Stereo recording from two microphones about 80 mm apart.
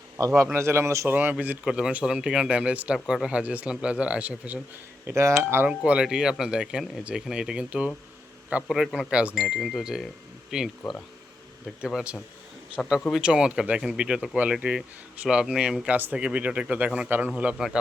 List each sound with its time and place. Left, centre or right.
0.5 s a man's voice: right
1.1 s speech: right
1.6 s speech: centre
5.0 s a man's voice: right
5.6 s speech: centre
9.3 s speech: centre
12.8 s speech: centre
13.2 s speech: centre